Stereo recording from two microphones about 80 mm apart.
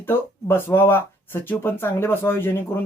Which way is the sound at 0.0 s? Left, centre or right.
Left.